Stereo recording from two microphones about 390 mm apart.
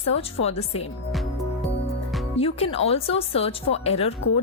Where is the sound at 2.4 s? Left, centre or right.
Centre.